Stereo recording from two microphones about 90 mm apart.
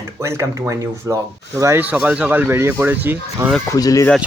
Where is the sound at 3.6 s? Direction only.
40° left (ahead or behind).